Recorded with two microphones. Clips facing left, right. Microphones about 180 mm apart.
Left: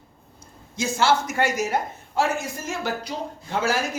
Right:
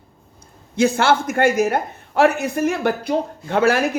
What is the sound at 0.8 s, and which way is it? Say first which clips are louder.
Speech: right 5 dB; 60° right (ahead or behind).